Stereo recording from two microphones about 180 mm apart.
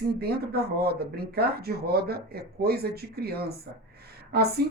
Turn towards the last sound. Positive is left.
turn(degrees=-60)  # may be behind; listen again after turning